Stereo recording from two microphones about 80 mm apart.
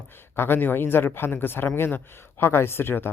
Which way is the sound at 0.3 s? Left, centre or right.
Left.